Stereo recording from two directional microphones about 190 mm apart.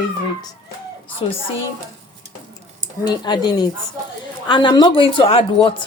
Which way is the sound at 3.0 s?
20° left (ahead or behind).